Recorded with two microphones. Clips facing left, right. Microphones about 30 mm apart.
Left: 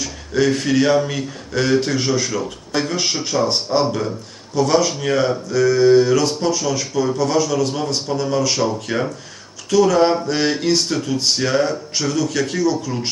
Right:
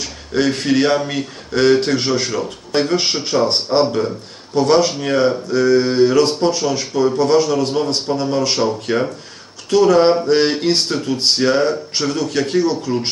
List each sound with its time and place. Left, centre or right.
0.0 s speech: right
2.4 s speech: right